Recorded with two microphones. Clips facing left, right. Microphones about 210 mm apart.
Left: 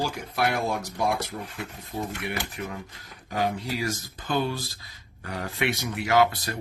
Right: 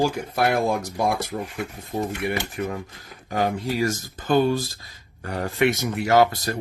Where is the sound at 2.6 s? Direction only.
55° right (ahead or behind).